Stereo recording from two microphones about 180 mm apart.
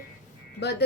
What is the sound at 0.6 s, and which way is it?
Speech, 70° left (ahead or behind).